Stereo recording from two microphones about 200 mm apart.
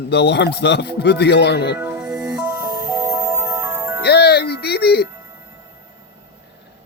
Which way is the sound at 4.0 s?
55° left (ahead or behind).